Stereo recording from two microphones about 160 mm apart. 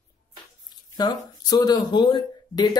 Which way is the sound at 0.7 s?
25° left (ahead or behind).